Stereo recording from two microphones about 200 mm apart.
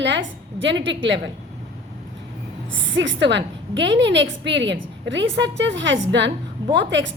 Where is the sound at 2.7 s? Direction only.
65° right (ahead or behind).